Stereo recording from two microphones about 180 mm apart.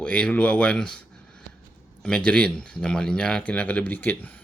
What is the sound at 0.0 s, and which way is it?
Speech, 5° left (ahead or behind).